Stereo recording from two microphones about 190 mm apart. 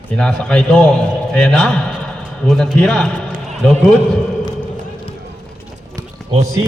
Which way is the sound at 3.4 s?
Centre (ahead or behind).